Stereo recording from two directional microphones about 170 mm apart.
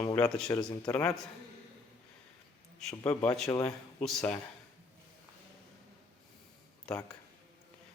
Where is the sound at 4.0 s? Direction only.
5° left (ahead or behind).